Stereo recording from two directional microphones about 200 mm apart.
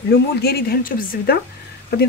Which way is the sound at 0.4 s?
50° left (ahead or behind).